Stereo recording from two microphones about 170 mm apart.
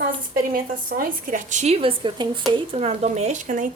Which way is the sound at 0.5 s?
60° right (ahead or behind).